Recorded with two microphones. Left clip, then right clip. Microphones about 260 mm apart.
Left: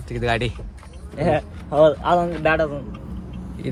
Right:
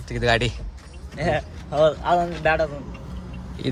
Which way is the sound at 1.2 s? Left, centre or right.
Left.